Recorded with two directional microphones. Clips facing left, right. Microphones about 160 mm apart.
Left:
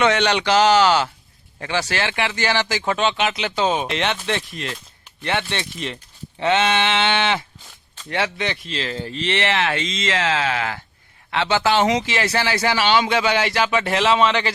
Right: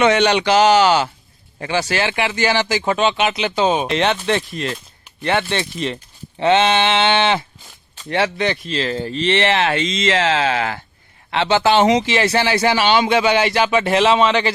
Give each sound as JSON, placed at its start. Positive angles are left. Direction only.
{"t": 0.0, "sound": "speech", "side_deg": -10}
{"t": 3.8, "sound": "speech", "side_deg": -35}